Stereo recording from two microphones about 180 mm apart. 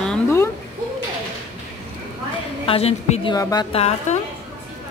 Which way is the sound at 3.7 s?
35° left (ahead or behind).